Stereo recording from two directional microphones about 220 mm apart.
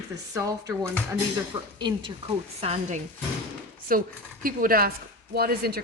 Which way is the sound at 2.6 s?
30° right (ahead or behind).